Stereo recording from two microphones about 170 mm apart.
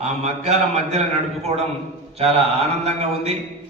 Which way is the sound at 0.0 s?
40° right (ahead or behind).